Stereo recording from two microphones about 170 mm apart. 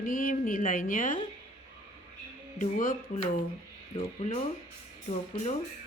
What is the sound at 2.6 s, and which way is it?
Speech, 50° left (ahead or behind).